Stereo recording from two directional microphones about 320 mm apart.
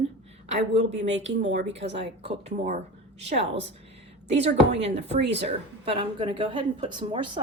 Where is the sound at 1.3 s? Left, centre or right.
Right.